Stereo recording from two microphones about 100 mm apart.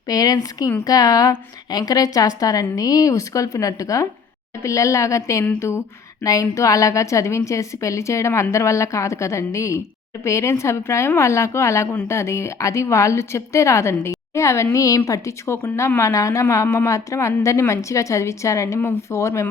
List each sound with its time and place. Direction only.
0.1 s a woman's voice: 40° left (ahead or behind)